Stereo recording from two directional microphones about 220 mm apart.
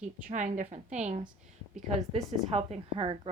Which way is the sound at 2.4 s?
30° right (ahead or behind).